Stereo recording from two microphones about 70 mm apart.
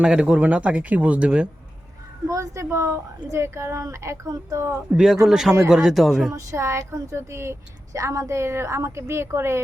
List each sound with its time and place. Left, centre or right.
0.0 s speech: centre
2.2 s a woman's voice: right
5.2 s speech: centre
6.3 s a woman's voice: right